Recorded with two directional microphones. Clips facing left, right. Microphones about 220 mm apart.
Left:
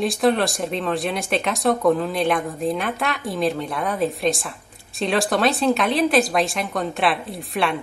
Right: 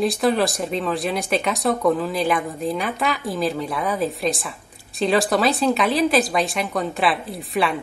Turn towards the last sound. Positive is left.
turn(degrees=0)  # may be behind; listen again after turning